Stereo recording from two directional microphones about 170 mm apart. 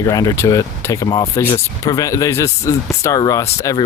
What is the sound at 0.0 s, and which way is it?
Speech, 20° left (ahead or behind).